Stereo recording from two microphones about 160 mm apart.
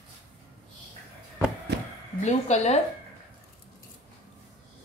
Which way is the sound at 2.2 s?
45° left (ahead or behind).